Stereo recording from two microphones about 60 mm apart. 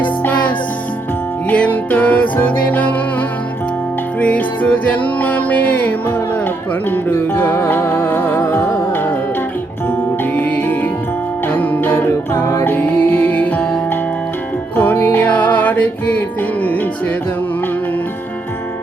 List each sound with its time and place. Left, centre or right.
0.0 s music: left
10.3 s music: left
12.3 s music: left
12.6 s music: left
14.8 s music: left